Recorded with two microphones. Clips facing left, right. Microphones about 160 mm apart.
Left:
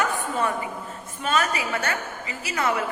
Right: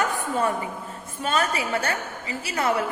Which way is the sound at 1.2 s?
35° right (ahead or behind).